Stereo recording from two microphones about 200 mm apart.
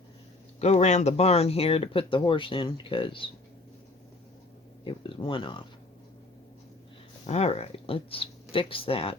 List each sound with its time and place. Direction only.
0.6 s speech: 35° left (ahead or behind)
4.9 s speech: 25° left (ahead or behind)
7.3 s speech: 30° left (ahead or behind)